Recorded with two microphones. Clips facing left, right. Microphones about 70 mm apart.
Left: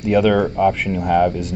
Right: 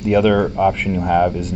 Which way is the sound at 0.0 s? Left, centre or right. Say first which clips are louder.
Right 1 dB; centre.